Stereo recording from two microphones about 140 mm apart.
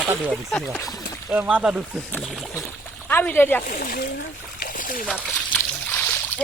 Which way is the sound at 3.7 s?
85° left.